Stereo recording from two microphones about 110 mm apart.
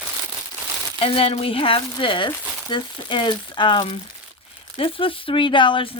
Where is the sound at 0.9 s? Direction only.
60° left (ahead or behind).